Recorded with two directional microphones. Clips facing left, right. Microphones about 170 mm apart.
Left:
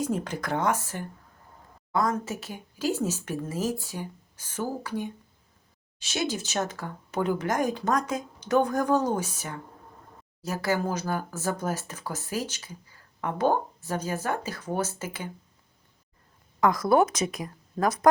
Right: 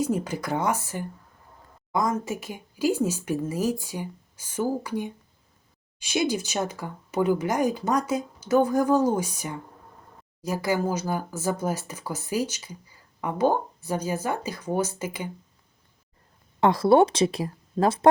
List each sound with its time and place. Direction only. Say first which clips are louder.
0.0 s speech: right 3 dB; 10° right (ahead or behind)
16.6 s speech: right 3 dB; 30° right (ahead or behind)